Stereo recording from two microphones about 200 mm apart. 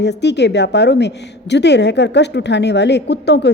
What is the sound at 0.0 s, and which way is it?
A woman's voice, 60° left (ahead or behind).